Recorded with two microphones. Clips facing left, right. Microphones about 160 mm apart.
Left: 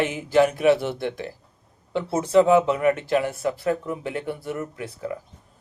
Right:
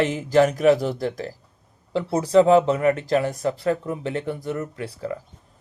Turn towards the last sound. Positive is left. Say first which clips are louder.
# right 1 dB
turn(degrees=-30)  # may be behind; listen again after turning